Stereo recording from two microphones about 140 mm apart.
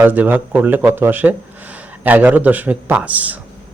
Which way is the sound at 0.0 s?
15° right (ahead or behind).